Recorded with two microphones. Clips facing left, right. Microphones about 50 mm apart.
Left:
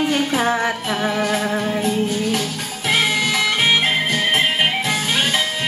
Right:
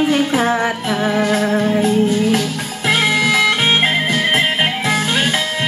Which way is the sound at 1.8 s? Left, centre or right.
Right.